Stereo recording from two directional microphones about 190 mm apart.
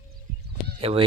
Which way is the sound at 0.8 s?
30° right (ahead or behind).